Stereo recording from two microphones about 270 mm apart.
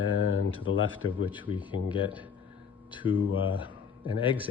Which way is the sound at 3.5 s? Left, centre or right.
Centre.